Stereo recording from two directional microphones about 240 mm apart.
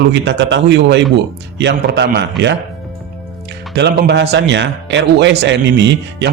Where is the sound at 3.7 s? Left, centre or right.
Right.